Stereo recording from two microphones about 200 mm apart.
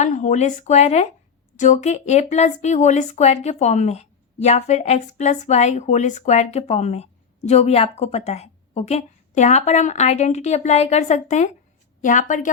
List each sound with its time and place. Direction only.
0.0 s speech: 40° left (ahead or behind)